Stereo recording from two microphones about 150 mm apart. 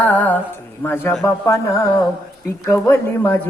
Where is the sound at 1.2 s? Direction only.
20° left (ahead or behind).